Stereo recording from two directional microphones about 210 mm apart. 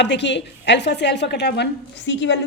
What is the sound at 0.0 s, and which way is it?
A woman's voice, 55° left (ahead or behind).